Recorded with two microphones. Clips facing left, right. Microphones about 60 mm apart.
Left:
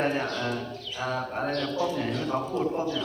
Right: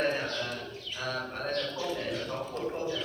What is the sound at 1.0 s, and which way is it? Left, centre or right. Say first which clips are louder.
A man's voice: left 5 dB; centre.